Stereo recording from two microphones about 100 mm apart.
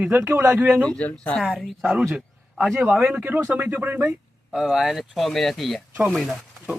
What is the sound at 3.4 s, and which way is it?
Speech, 20° right (ahead or behind).